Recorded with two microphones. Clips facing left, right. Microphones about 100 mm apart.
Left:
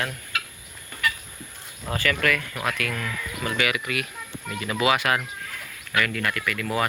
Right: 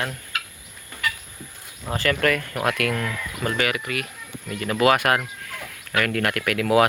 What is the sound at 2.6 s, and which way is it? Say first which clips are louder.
Speech: right 5 dB; 55° right (ahead or behind).